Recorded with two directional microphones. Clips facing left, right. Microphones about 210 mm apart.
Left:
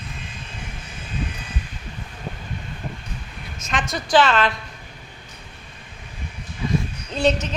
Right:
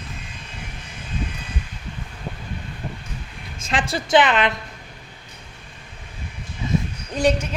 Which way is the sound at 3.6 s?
30° right (ahead or behind).